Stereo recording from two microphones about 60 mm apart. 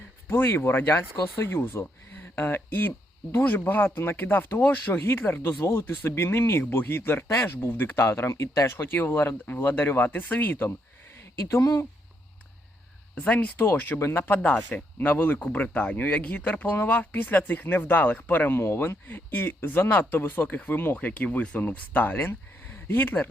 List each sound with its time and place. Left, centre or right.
0.3 s speech: left
5.8 s speech: left
13.1 s speech: left